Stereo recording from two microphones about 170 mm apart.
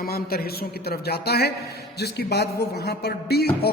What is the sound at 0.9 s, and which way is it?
Speech, 70° left (ahead or behind).